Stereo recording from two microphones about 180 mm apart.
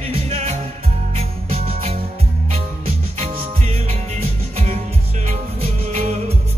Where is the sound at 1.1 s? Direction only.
35° right (ahead or behind).